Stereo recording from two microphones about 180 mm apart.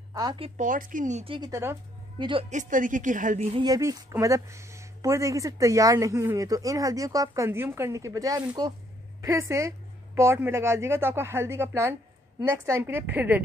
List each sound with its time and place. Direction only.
0.1 s speech: 25° right (ahead or behind)
0.6 s a woman's voice: 50° right (ahead or behind)
1.3 s speech: 20° right (ahead or behind)
2.5 s a woman's voice: 45° right (ahead or behind)
3.5 s speech: 20° right (ahead or behind)